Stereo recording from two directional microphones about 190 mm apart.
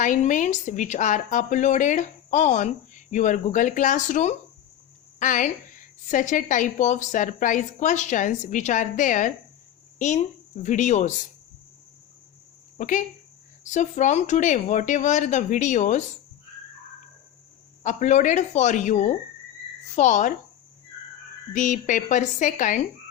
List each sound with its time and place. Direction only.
0.0 s a woman's voice: 40° left (ahead or behind)
12.7 s a woman's voice: 45° left (ahead or behind)
17.8 s a woman's voice: 40° left (ahead or behind)
21.5 s a woman's voice: 40° left (ahead or behind)